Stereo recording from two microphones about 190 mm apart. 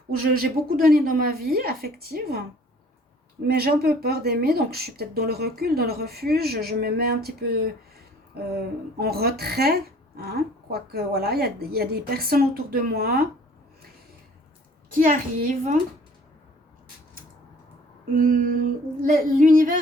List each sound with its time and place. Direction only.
0.2 s speech: 50° right (ahead or behind)
3.4 s a woman's voice: 55° right (ahead or behind)
9.0 s a woman's voice: 55° right (ahead or behind)
14.8 s speech: 45° right (ahead or behind)
18.1 s speech: 45° right (ahead or behind)